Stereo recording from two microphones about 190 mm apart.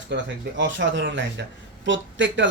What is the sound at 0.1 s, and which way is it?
Speech, 65° right (ahead or behind).